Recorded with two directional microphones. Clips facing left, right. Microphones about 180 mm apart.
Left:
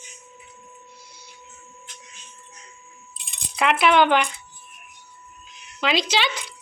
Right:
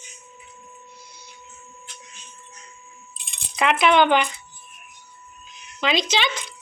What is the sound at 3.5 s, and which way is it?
Speech, 5° left (ahead or behind).